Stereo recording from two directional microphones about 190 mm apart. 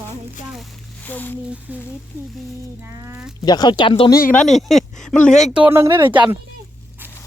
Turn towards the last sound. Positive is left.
turn(degrees=-10)  # may be behind; listen again after turning